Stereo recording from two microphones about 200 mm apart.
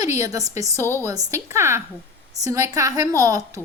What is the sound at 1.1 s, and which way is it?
A woman's voice, 15° right (ahead or behind).